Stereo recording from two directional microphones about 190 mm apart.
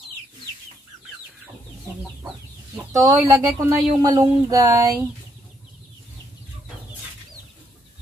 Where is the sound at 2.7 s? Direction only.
10° right (ahead or behind).